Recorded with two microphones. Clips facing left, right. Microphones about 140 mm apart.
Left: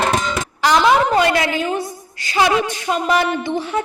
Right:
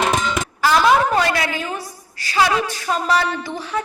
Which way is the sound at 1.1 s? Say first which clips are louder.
Left 3 dB; 25° left (ahead or behind).